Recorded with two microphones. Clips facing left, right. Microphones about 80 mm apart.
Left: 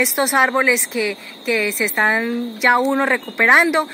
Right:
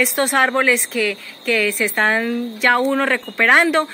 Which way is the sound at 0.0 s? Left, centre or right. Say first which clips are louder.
Even; centre.